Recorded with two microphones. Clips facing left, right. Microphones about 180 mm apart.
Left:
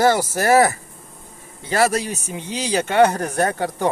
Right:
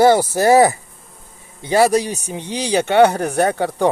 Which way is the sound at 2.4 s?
65° right (ahead or behind).